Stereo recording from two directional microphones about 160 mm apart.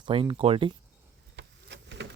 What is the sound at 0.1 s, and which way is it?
Speech, 35° right (ahead or behind).